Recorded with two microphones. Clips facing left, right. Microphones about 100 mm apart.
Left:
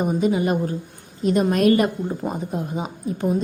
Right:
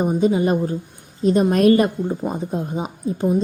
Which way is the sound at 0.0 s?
25° right (ahead or behind).